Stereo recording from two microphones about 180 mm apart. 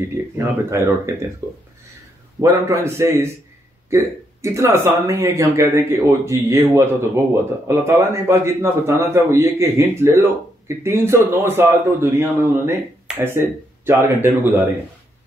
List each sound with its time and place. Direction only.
0.2 s a man's voice: 15° right (ahead or behind)